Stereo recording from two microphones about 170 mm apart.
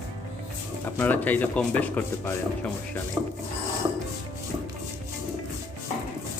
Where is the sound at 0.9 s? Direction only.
10° left (ahead or behind).